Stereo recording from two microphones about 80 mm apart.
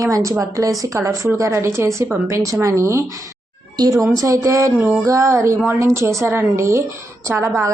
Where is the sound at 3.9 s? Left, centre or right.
Right.